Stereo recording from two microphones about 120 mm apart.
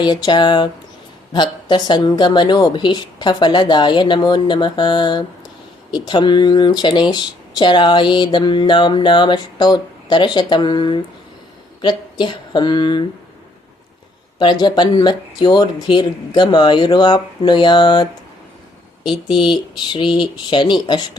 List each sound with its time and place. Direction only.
0.0 s speech: 40° left (ahead or behind)
14.3 s speech: 40° left (ahead or behind)